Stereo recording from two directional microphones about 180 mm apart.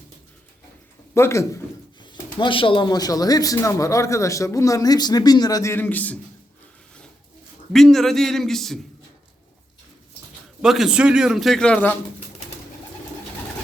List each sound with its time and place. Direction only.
1.1 s speech: 15° left (ahead or behind)
7.7 s a man's voice: centre (ahead or behind)
10.6 s a man's voice: centre (ahead or behind)